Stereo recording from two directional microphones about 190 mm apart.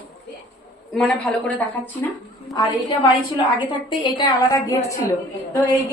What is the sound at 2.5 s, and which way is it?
A woman's voice, 25° left (ahead or behind).